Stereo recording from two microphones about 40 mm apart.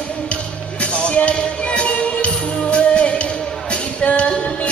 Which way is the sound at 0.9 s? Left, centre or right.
Left.